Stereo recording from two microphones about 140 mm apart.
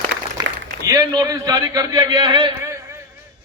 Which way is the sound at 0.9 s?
25° right (ahead or behind).